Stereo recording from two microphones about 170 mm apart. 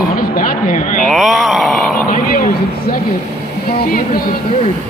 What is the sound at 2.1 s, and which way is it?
Speech, 55° left (ahead or behind).